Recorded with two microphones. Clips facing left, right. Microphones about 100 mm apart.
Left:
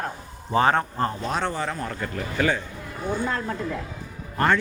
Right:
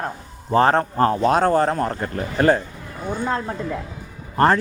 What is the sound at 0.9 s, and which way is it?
Speech, 70° right (ahead or behind).